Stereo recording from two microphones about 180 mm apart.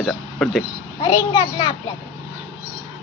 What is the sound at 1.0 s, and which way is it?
Speech, 20° left (ahead or behind).